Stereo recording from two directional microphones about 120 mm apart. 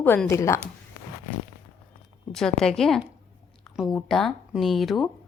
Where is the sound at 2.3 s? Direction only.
5° left (ahead or behind).